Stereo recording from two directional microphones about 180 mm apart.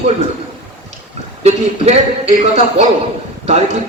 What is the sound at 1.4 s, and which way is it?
A man's voice, 35° right (ahead or behind).